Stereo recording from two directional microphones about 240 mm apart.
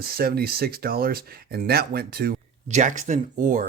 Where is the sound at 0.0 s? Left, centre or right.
Right.